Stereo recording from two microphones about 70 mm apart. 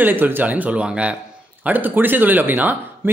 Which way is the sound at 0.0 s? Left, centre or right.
Right.